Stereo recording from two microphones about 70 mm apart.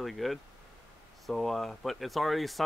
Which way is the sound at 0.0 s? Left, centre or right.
Centre.